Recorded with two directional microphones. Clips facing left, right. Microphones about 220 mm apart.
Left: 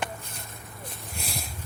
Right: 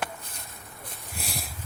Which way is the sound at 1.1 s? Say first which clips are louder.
Right 1 dB; centre (ahead or behind).